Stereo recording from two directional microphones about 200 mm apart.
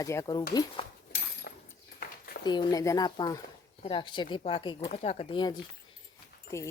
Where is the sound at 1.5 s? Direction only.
60° left (ahead or behind).